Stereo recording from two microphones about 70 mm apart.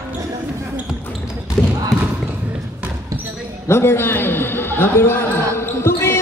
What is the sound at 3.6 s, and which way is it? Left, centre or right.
A man's voice, left.